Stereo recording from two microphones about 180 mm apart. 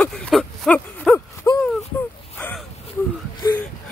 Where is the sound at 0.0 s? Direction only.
5° left (ahead or behind).